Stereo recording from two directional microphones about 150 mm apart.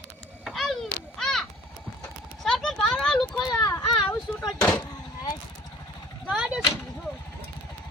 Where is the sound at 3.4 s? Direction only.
25° left (ahead or behind).